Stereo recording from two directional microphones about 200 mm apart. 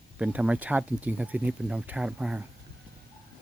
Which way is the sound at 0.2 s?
5° right (ahead or behind).